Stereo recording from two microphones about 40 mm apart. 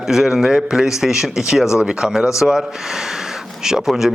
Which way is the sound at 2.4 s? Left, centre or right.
Centre.